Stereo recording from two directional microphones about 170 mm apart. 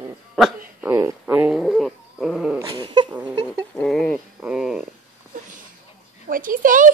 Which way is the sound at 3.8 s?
5° left (ahead or behind).